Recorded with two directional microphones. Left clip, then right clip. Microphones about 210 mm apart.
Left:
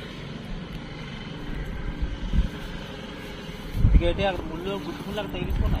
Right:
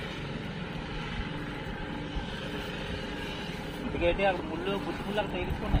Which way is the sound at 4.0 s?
40° left (ahead or behind).